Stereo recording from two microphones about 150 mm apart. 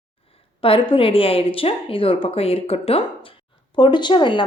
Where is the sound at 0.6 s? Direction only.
40° left (ahead or behind).